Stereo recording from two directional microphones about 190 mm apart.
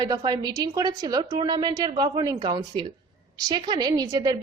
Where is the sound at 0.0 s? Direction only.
20° right (ahead or behind).